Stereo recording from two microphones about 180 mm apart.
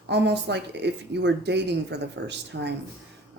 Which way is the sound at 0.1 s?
70° right (ahead or behind).